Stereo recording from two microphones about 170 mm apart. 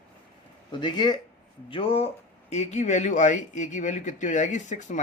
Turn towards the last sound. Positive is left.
turn(degrees=45)  # may be behind; listen again after turning